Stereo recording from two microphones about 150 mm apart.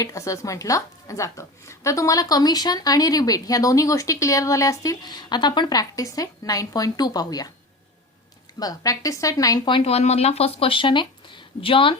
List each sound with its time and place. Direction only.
0.0 s a woman's voice: 20° left (ahead or behind)
8.5 s speech: 25° left (ahead or behind)